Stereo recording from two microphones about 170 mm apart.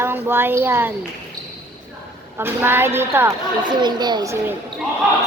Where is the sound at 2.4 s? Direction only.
15° right (ahead or behind).